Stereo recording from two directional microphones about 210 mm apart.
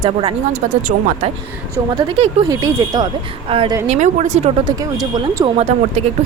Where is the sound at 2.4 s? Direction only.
15° right (ahead or behind); by 4.5 s 35° right (ahead or behind).